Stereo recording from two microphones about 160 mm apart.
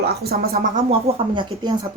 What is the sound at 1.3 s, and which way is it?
Speech, 30° right (ahead or behind).